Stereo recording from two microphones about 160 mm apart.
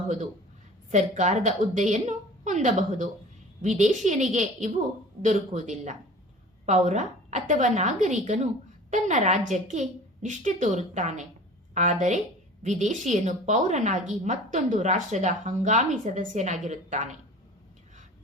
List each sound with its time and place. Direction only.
0.9 s a woman's voice: 45° right (ahead or behind)